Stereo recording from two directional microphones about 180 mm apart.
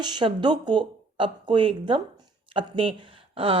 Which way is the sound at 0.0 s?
25° right (ahead or behind).